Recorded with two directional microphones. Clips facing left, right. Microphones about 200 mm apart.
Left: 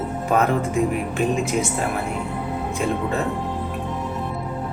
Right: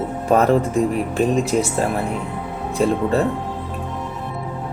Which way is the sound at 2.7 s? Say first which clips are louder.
Right 7 dB; 35° right (ahead or behind).